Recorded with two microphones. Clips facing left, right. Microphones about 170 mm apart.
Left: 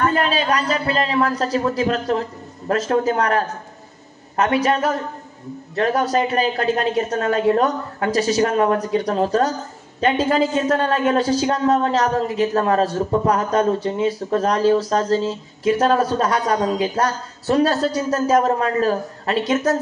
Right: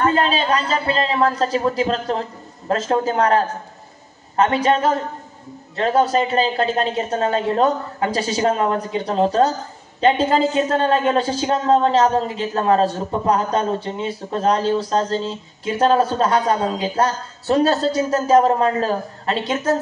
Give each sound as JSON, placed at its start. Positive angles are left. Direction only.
{"t": 0.0, "sound": "a man's voice", "side_deg": -30}